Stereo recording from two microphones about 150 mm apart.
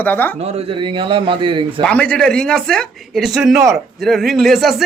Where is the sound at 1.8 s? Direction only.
10° left (ahead or behind).